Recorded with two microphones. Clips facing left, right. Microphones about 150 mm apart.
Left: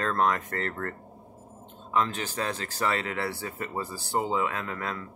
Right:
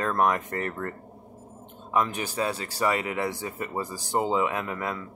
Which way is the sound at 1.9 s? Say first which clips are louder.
Right 1 dB; 15° right (ahead or behind).